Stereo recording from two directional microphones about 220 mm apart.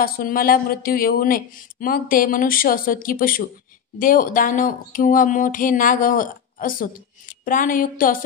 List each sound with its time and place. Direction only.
0.0 s speech: 40° left (ahead or behind)